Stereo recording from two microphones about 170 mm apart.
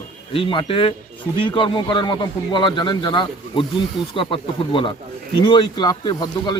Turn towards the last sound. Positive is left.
turn(degrees=25)  # may be behind; listen again after turning